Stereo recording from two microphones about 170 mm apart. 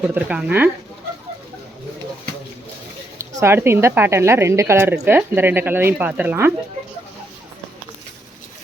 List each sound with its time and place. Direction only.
0.1 s a woman's voice: 5° right (ahead or behind)
3.2 s a woman's voice: 15° right (ahead or behind)